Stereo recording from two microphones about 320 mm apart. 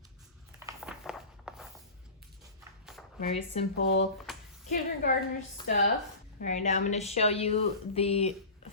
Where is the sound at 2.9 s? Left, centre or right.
Centre.